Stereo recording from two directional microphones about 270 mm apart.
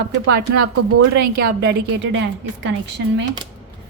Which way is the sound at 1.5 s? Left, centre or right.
Right.